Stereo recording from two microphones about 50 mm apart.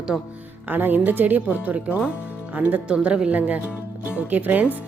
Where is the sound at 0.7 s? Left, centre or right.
Right.